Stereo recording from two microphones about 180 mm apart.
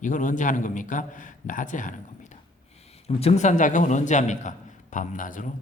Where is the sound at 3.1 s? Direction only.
35° left (ahead or behind).